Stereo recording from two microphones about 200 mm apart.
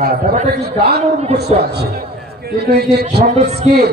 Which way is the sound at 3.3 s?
35° right (ahead or behind).